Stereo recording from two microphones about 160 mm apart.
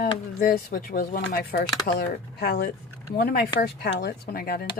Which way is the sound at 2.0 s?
85° left.